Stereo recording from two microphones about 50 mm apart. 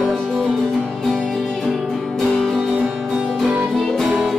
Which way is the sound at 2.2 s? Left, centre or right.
Centre.